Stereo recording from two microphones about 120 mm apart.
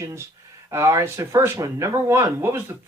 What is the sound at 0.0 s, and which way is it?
Speech, 25° right (ahead or behind).